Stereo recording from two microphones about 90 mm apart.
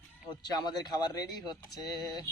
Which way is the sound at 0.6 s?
50° left (ahead or behind).